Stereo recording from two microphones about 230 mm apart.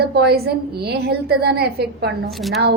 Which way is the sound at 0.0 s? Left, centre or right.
Right.